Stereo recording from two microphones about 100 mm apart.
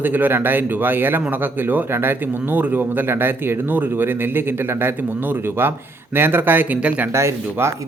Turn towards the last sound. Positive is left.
turn(degrees=-25)  # may be behind; listen again after turning